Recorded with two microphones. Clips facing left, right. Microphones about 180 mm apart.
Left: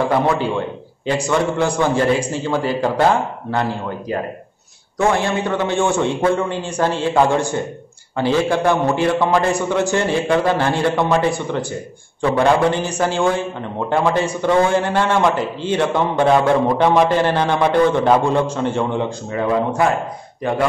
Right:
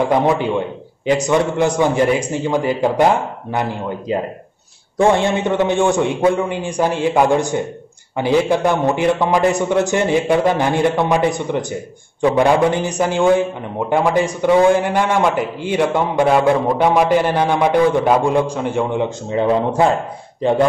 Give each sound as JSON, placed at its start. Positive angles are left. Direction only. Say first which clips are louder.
{"t": 1.0, "sound": "a man's voice", "louder": "right 3 dB", "side_deg": -20}